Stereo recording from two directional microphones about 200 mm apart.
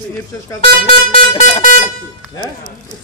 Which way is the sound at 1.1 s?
30° left (ahead or behind).